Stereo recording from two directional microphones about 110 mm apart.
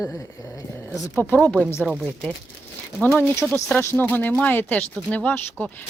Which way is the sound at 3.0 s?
25° left (ahead or behind).